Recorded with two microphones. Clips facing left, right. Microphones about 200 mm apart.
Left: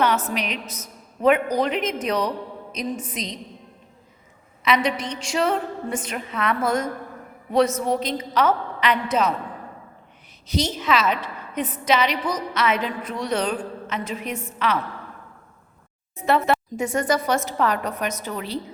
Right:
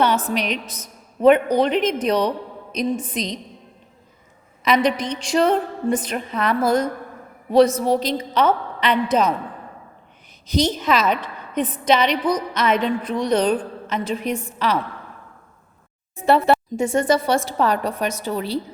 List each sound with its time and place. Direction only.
0.0 s a sound: 30° right (ahead or behind)
0.7 s a man's voice: 30° right (ahead or behind)
4.8 s a woman's voice: 35° right (ahead or behind)
10.8 s a woman's voice: 35° right (ahead or behind)
16.2 s a woman's voice: 30° right (ahead or behind)